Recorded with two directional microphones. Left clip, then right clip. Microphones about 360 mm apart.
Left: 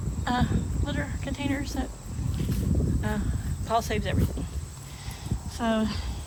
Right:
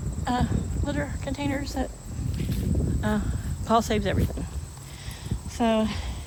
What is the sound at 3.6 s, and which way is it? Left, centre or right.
Speech, centre.